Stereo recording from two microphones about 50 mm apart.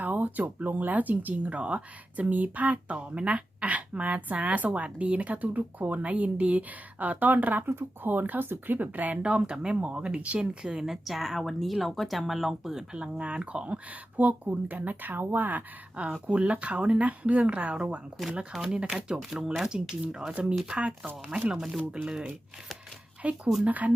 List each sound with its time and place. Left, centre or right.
0.0 s speech: right
7.7 s speech: right
8.1 s speech: right
9.2 s speech: right; by 12.8 s centre
12.9 s speech: right
16.2 s speech: right
18.3 s speech: centre
23.2 s speech: right